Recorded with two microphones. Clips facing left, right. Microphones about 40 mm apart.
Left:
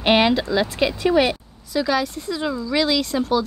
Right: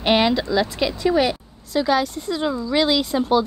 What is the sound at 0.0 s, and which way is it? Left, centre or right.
Speech, centre.